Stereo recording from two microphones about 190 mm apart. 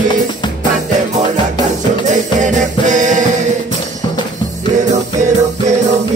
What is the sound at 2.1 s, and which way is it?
Music, 40° right (ahead or behind).